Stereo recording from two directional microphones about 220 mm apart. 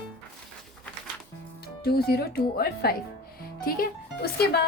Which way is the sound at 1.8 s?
45° left (ahead or behind).